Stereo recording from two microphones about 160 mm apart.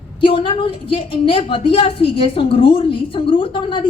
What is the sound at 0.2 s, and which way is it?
A woman's voice, 30° left (ahead or behind).